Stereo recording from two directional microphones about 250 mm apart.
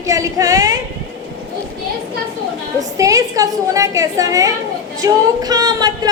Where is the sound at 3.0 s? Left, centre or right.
Centre.